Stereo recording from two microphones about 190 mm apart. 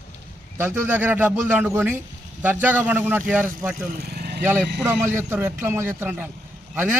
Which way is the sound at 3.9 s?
55° right (ahead or behind).